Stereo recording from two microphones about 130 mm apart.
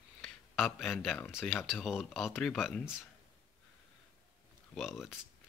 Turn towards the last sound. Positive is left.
turn(degrees=0)  # may be behind; listen again after turning